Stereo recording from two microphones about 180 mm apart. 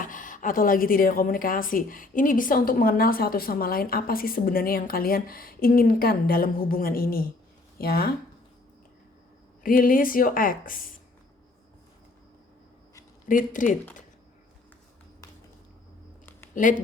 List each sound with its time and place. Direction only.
0.0 s a woman's voice: 45° left (ahead or behind)
9.6 s a woman's voice: 50° left (ahead or behind)
13.2 s a woman's voice: 45° left (ahead or behind)